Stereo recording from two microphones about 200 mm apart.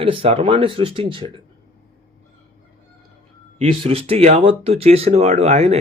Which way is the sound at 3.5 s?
30° right (ahead or behind).